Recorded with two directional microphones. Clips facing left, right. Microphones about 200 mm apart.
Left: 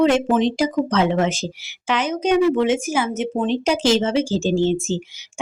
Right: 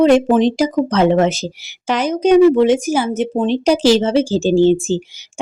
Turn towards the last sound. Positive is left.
turn(degrees=-35)  # may be behind; listen again after turning